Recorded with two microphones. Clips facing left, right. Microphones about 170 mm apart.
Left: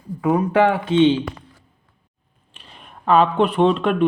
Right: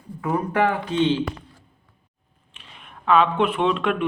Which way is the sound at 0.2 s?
90° left.